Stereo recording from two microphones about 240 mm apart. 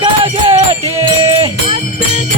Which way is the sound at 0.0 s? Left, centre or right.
Right.